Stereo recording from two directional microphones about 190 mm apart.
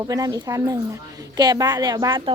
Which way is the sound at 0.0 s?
20° right (ahead or behind).